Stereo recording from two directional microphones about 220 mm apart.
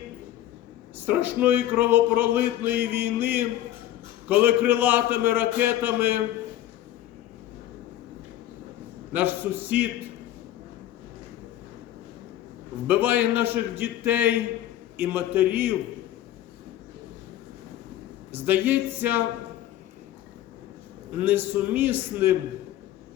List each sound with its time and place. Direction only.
0.9 s speech: 10° right (ahead or behind)
9.1 s speech: 10° right (ahead or behind)
12.9 s speech: 10° right (ahead or behind)
18.3 s speech: 10° right (ahead or behind)
21.2 s speech: 10° right (ahead or behind)